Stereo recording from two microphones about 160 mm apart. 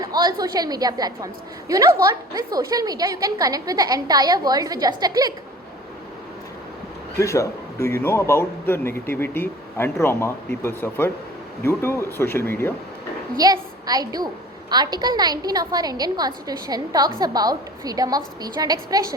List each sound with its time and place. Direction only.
0.0 s a woman's voice: 25° right (ahead or behind)
7.2 s speech: 20° left (ahead or behind)
13.3 s a woman's voice: 25° right (ahead or behind)